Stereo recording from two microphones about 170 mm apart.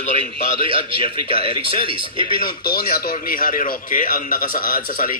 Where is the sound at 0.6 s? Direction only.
30° right (ahead or behind).